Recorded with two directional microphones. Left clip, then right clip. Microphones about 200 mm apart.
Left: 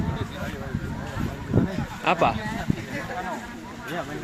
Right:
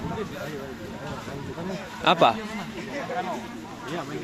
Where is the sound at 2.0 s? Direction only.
20° right (ahead or behind).